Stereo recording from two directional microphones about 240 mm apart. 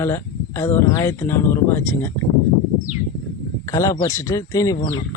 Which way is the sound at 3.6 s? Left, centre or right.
Centre.